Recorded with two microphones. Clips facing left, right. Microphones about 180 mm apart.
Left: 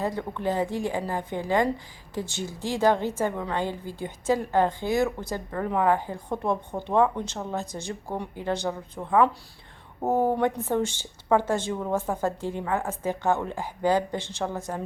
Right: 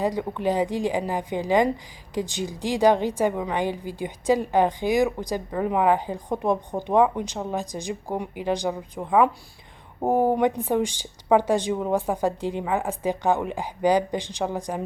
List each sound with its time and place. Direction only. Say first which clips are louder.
0.0 s a woman's voice: right 4 dB; 15° right (ahead or behind)